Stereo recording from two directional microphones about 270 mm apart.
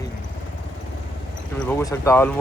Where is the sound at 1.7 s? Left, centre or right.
Centre.